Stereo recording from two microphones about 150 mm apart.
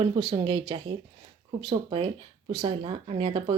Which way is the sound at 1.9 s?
40° right (ahead or behind).